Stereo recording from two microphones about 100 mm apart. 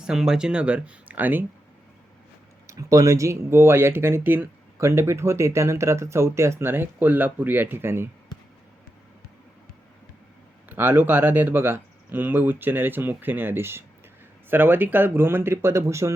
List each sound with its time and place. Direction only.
0.0 s speech: 5° right (ahead or behind)
2.6 s speech: 35° right (ahead or behind)
10.7 s speech: 20° right (ahead or behind)